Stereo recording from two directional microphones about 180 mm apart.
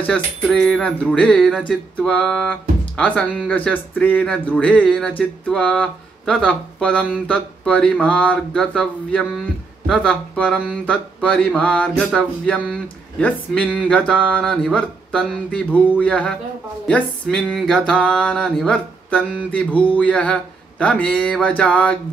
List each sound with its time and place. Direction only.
0.0 s music: 5° left (ahead or behind)
3.0 s speech: 10° left (ahead or behind)
15.0 s music: 5° left (ahead or behind)
16.0 s speech: 5° left (ahead or behind)